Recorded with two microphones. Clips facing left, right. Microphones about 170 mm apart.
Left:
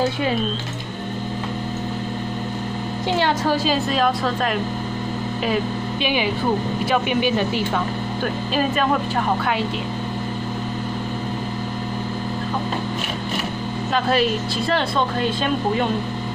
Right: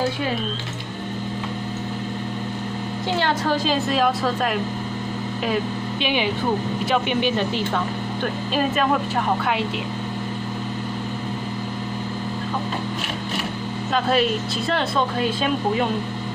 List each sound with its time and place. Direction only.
3.2 s a woman's voice: 15° left (ahead or behind)
3.6 s speech: centre (ahead or behind)
6.0 s speech: centre (ahead or behind)
13.9 s speech: centre (ahead or behind)